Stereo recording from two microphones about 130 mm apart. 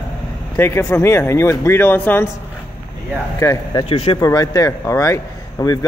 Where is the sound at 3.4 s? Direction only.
30° left (ahead or behind).